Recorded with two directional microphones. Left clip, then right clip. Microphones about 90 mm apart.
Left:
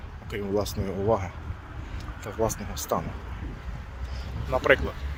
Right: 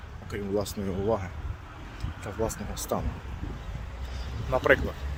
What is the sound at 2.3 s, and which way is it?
Speech, 10° right (ahead or behind).